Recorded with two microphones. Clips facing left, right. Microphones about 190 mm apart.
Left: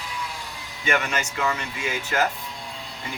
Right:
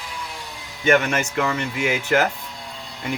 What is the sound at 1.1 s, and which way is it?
Speech, 55° right (ahead or behind).